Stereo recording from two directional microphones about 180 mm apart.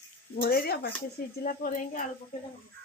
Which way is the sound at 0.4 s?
55° left (ahead or behind).